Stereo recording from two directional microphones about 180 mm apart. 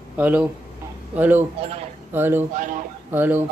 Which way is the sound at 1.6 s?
35° right (ahead or behind).